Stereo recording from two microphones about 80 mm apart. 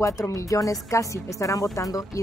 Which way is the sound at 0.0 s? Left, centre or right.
Left.